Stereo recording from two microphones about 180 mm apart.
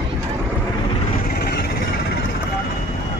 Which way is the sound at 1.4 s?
60° left (ahead or behind).